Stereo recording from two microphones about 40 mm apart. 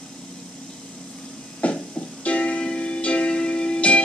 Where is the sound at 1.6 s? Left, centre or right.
Left.